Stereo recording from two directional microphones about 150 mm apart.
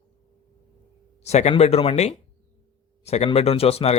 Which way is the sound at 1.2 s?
45° left (ahead or behind).